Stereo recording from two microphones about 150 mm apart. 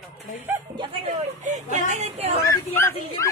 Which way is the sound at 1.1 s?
55° right (ahead or behind).